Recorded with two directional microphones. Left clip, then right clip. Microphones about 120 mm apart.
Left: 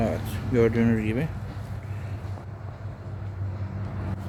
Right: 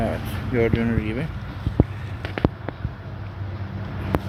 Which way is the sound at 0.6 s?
65° left (ahead or behind).